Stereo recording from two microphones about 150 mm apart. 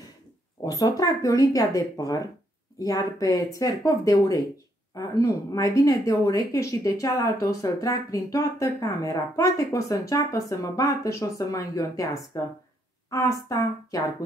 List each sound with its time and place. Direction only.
0.6 s speech: 25° left (ahead or behind)